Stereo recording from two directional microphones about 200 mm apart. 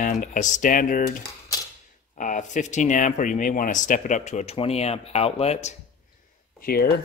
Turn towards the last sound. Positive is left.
turn(degrees=50)  # may be behind; listen again after turning